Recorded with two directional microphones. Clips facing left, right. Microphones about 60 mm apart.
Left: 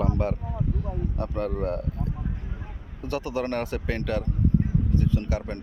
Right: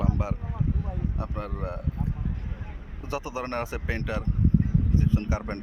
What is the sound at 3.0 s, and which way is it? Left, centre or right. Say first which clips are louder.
Speech: left 4 dB; centre.